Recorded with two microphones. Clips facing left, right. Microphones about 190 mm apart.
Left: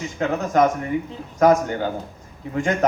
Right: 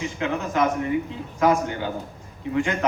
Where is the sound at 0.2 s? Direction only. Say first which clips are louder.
Left 5 dB; 45° left (ahead or behind).